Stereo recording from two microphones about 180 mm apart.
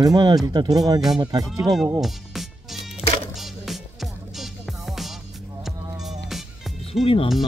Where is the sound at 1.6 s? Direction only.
Centre (ahead or behind).